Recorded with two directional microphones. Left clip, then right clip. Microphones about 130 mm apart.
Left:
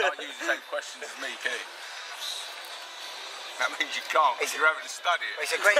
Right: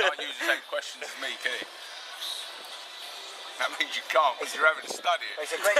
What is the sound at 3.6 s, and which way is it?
Speech, 10° right (ahead or behind).